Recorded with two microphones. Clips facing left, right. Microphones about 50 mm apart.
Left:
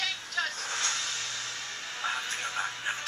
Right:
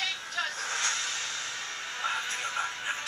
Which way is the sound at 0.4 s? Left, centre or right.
Centre.